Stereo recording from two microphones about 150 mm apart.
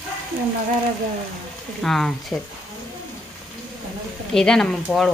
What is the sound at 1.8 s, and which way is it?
Speech, centre (ahead or behind).